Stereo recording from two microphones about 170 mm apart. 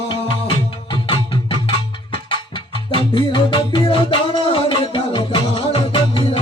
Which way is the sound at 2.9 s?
30° left (ahead or behind).